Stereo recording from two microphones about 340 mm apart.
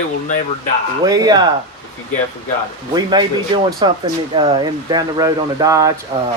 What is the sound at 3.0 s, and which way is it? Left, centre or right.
Speech, centre.